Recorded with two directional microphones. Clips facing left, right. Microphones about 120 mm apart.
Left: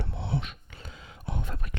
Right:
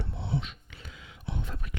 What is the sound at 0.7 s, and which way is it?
Whispering, 35° left (ahead or behind).